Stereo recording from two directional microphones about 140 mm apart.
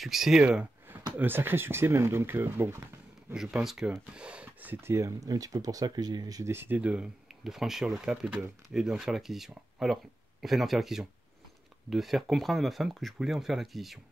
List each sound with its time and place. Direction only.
0.0 s speech: centre (ahead or behind)
3.3 s speech: 5° right (ahead or behind)